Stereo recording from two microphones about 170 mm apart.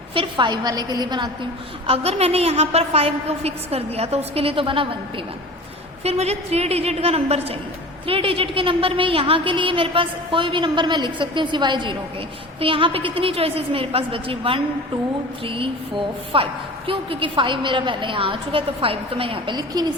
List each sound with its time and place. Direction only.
0.1 s a woman's voice: 30° right (ahead or behind)
1.9 s a woman's voice: 35° right (ahead or behind)
6.0 s a woman's voice: 40° right (ahead or behind); by 19.9 s 25° right (ahead or behind)